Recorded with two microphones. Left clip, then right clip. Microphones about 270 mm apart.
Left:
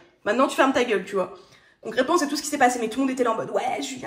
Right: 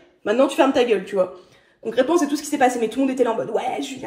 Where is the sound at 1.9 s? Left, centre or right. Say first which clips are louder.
Right 3 dB; left.